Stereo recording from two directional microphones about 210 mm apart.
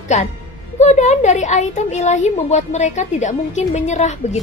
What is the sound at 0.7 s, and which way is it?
Speech, 35° left (ahead or behind).